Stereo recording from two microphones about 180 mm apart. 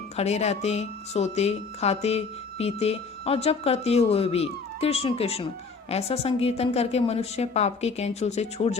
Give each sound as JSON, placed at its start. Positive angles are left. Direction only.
{"t": 0.2, "sound": "speech", "side_deg": 35}